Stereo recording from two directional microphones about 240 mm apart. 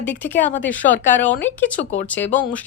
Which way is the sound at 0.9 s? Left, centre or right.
Left.